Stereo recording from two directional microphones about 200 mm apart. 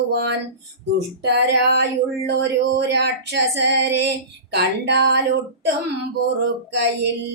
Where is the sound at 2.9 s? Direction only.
60° right (ahead or behind).